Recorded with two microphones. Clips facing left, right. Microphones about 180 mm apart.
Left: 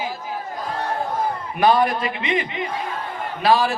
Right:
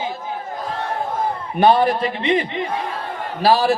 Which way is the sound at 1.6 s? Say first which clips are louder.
Right 3 dB; 30° right (ahead or behind).